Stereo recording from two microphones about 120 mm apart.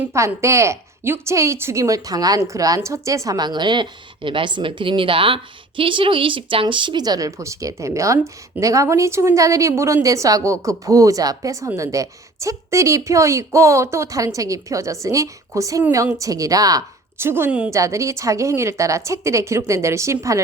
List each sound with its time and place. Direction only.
0.0 s a woman's voice: 25° right (ahead or behind)